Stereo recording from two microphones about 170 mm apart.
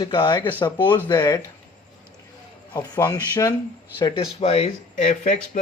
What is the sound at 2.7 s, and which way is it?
A man's voice, 20° left (ahead or behind).